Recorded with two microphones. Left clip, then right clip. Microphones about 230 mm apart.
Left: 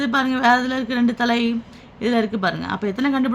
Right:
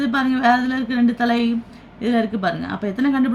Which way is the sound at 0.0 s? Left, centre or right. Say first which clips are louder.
Even; left.